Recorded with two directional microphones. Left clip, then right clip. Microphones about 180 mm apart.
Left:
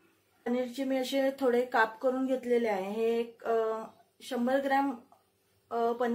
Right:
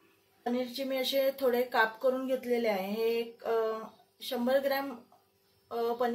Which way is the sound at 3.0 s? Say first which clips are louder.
Left 3 dB; 30° left (ahead or behind).